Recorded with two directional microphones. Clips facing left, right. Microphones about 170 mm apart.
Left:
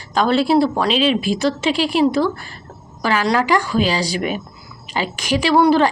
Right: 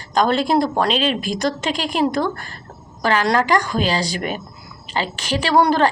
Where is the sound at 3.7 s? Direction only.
40° right (ahead or behind).